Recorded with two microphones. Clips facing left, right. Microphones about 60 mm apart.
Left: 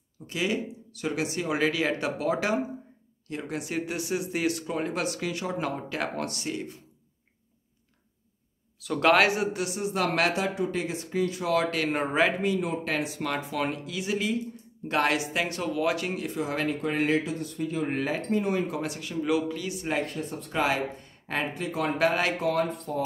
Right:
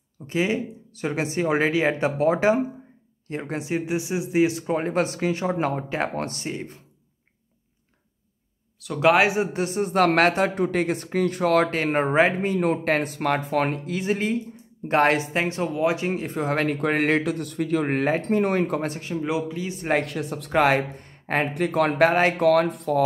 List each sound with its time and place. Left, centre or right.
0.3 s speech: right
8.7 s speech: centre
9.0 s a man's voice: centre
9.5 s a man's voice: right
16.3 s speech: right
19.3 s a man's voice: centre
19.7 s speech: right
20.0 s speech: right
22.4 s speech: right